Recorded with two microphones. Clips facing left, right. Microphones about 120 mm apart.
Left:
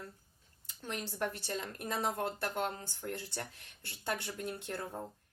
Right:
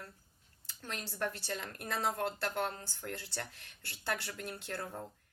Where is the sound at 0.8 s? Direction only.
20° left (ahead or behind).